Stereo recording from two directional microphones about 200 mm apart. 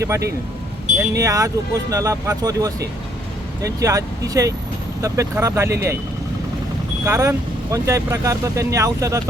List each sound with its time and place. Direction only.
0.9 s speech: 15° right (ahead or behind)
5.0 s speech: 15° right (ahead or behind)
7.0 s speech: 15° right (ahead or behind)